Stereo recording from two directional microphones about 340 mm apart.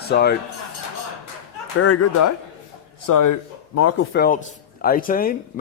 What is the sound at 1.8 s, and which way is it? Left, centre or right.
Speech, left.